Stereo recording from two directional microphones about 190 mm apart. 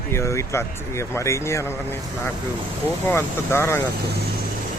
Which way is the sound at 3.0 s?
15° left (ahead or behind).